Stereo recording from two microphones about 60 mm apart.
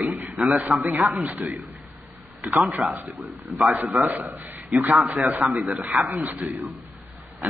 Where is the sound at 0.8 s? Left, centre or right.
Right.